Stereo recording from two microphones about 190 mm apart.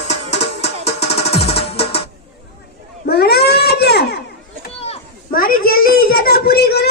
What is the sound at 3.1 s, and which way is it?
Baby cry, 55° left (ahead or behind).